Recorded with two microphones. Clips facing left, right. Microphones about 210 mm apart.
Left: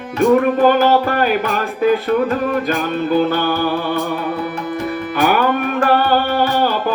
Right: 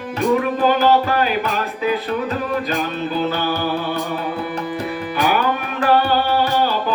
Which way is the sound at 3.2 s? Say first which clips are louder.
Left 4 dB; 55° left (ahead or behind).